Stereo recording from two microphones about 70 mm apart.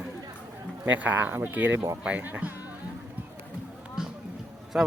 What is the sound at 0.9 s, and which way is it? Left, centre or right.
Speech, right.